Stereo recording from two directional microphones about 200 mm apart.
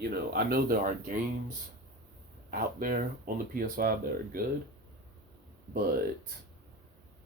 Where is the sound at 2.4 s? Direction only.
45° right (ahead or behind).